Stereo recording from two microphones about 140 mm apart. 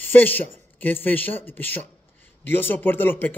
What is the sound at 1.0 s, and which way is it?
Speech, 15° left (ahead or behind).